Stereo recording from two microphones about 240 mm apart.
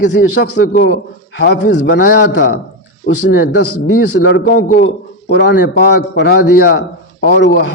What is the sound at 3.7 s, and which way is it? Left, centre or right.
Speech, left.